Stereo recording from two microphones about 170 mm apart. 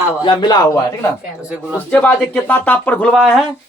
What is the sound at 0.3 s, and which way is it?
Speech, 25° left (ahead or behind).